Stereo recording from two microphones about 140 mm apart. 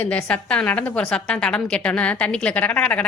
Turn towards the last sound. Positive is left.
turn(degrees=10)  # may be behind; listen again after turning